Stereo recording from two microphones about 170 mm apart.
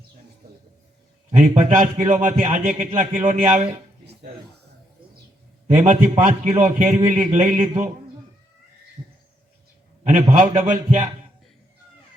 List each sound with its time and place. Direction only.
1.4 s speech: 45° right (ahead or behind)
5.7 s speech: 45° right (ahead or behind)
10.0 s a man's voice: 40° right (ahead or behind)